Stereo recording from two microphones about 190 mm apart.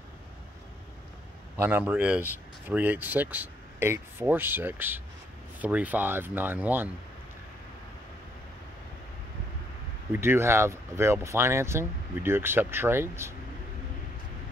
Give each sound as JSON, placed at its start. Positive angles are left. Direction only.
{"t": 1.6, "sound": "speech", "side_deg": -10}
{"t": 10.1, "sound": "speech", "side_deg": -10}